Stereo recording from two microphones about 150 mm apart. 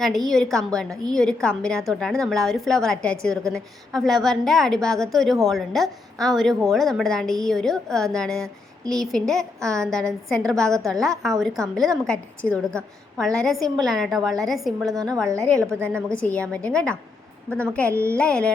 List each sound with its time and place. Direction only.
0.0 s a woman's voice: centre (ahead or behind)
14.8 s a woman's voice: 25° right (ahead or behind)
15.4 s a woman's voice: 5° left (ahead or behind)